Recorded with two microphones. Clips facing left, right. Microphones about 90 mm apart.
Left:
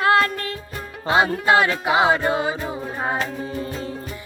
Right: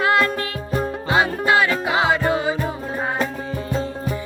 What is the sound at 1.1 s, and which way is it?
Music, 30° left (ahead or behind).